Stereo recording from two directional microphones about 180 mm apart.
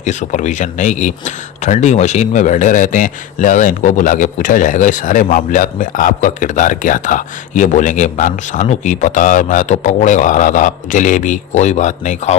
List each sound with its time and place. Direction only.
0.0 s speech: 40° left (ahead or behind)